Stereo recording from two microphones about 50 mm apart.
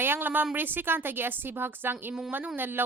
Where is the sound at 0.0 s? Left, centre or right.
Right.